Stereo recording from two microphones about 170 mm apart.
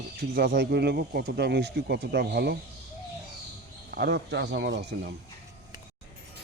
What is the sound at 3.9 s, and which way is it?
Speech, 75° right (ahead or behind).